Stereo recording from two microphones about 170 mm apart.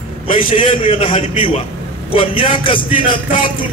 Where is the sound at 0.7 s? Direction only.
30° left (ahead or behind).